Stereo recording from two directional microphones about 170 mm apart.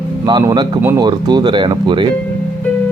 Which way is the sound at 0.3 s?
25° right (ahead or behind).